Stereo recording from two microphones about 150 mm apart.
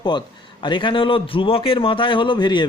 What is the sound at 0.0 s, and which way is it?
A man's voice, 30° left (ahead or behind).